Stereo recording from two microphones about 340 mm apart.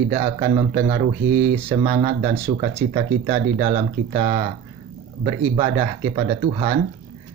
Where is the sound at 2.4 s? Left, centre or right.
Centre.